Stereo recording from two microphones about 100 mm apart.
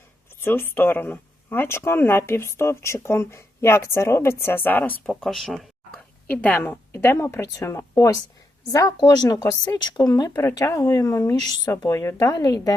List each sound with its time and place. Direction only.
0.3 s speech: 25° left (ahead or behind)
5.0 s speech: centre (ahead or behind)
6.2 s speech: 15° left (ahead or behind); by 12.7 s 35° left (ahead or behind)